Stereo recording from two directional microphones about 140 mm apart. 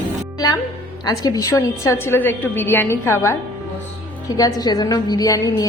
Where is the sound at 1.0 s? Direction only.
25° left (ahead or behind).